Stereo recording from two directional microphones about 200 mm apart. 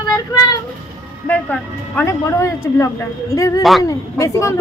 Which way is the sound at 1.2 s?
10° left (ahead or behind).